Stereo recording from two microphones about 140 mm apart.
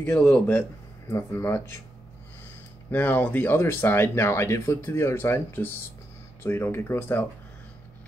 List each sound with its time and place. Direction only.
0.0 s speech: 10° left (ahead or behind)
2.9 s speech: 15° left (ahead or behind)